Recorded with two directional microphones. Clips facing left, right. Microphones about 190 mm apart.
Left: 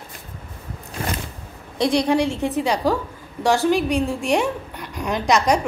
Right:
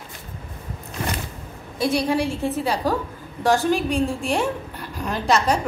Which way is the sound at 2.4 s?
15° left (ahead or behind).